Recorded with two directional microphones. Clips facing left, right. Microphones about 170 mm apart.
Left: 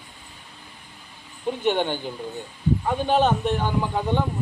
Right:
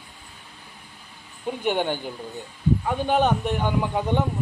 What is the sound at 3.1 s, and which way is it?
Speech, 15° right (ahead or behind).